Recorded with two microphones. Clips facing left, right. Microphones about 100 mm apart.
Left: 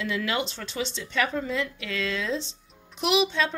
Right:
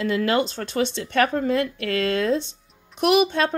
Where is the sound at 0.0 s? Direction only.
40° right (ahead or behind).